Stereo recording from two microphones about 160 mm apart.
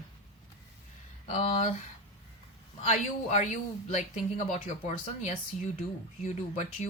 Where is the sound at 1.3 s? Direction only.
40° left (ahead or behind).